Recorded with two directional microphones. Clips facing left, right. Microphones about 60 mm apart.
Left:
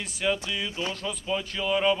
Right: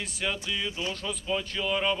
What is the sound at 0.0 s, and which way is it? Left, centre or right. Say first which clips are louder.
Speech: left 4 dB; centre.